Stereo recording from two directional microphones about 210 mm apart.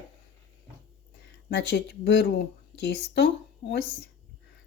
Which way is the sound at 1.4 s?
55° left (ahead or behind).